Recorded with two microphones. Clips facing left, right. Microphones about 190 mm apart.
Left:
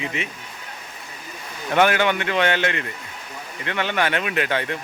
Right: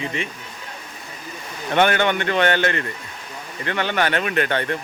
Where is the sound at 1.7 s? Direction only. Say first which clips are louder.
Even; 30° right (ahead or behind).